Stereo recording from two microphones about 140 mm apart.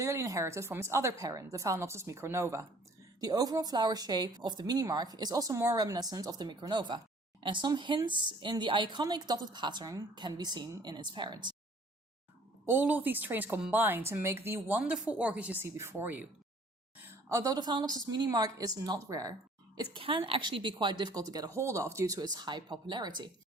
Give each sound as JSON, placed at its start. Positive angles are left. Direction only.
{"t": 0.0, "sound": "speech", "side_deg": -25}
{"t": 12.6, "sound": "a woman's voice", "side_deg": -15}